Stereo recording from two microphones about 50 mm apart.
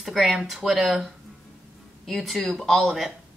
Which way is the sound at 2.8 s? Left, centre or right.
Centre.